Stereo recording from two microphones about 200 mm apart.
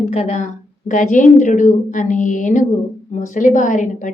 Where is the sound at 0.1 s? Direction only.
35° left (ahead or behind).